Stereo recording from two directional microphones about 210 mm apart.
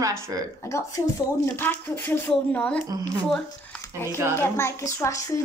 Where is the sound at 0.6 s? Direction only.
15° left (ahead or behind).